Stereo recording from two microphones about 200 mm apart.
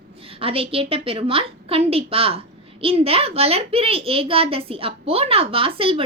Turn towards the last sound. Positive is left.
turn(degrees=-30)  # may be behind; listen again after turning